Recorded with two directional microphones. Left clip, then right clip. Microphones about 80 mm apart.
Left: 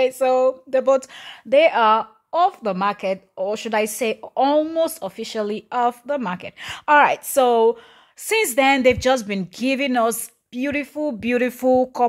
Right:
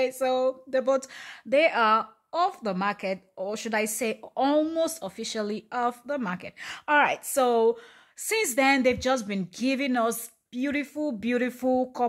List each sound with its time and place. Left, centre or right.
0.0 s a woman's voice: left
4.3 s a woman's voice: centre; by 7.4 s left
7.4 s a woman's voice: left
8.9 s a woman's voice: left
10.7 s a woman's voice: left
11.2 s speech: left